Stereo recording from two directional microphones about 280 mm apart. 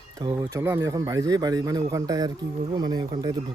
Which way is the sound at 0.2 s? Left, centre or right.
Centre.